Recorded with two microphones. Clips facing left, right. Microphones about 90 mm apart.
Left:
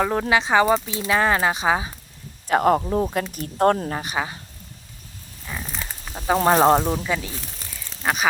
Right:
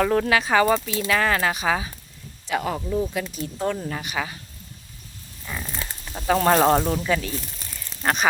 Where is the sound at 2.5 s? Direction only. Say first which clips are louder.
Left 7 dB; 50° left (ahead or behind).